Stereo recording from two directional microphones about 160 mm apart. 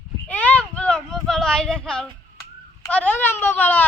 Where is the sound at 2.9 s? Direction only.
10° left (ahead or behind).